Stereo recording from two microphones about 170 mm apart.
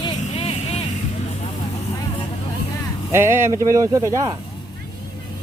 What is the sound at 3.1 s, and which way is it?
Speech, 15° right (ahead or behind).